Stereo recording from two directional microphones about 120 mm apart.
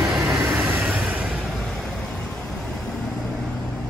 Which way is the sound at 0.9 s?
10° right (ahead or behind).